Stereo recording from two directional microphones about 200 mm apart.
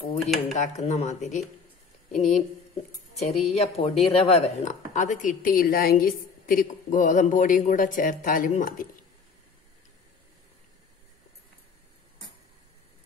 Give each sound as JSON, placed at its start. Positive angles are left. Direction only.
{"t": 0.2, "sound": "speech", "side_deg": 0}
{"t": 0.6, "sound": "a woman's voice", "side_deg": 35}